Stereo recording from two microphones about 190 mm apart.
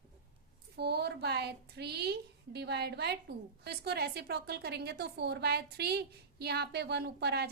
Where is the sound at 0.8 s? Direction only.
60° right (ahead or behind).